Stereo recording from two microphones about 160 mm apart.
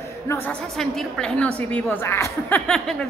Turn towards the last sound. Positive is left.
turn(degrees=5)  # may be behind; listen again after turning